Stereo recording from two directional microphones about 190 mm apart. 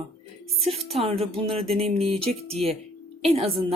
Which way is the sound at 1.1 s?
30° right (ahead or behind).